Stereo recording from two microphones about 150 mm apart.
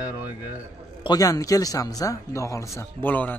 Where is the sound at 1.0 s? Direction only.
25° left (ahead or behind).